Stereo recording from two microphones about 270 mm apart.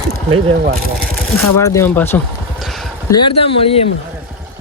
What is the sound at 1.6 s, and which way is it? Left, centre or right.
Speech, centre.